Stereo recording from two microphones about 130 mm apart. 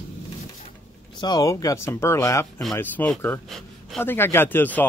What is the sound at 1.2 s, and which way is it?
Speech, 30° left (ahead or behind).